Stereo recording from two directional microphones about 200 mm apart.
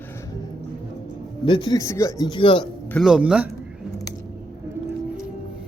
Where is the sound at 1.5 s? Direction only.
20° left (ahead or behind).